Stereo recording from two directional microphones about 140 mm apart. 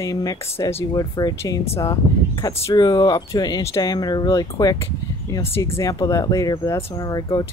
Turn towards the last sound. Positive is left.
turn(degrees=25)  # may be behind; listen again after turning